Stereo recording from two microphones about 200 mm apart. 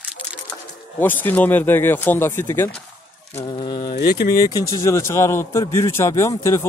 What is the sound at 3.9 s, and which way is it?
Speech, 50° left (ahead or behind).